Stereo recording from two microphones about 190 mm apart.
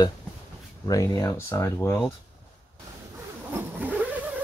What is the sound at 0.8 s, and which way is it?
Speech, 15° left (ahead or behind).